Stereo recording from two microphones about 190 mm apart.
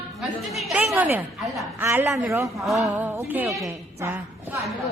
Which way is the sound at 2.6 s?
Centre (ahead or behind).